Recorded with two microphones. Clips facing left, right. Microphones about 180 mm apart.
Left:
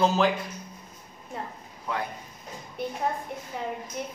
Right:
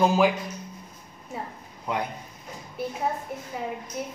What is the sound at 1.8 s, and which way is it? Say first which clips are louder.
Speech: right 2 dB; 20° right (ahead or behind).